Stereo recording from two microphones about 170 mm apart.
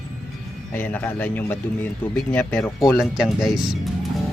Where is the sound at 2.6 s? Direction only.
20° left (ahead or behind).